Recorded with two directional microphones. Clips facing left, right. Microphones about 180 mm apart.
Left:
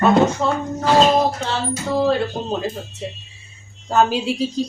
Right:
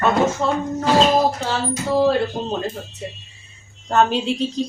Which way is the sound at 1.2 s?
Centre (ahead or behind).